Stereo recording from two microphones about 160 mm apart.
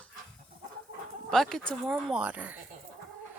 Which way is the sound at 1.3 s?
5° left (ahead or behind).